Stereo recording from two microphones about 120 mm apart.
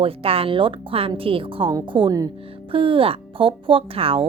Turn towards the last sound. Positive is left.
turn(degrees=-50)  # may be behind; listen again after turning